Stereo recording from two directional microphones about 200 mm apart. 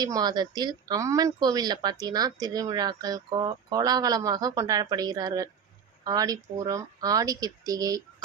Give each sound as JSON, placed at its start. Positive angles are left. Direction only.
{"t": 0.0, "sound": "speech", "side_deg": -20}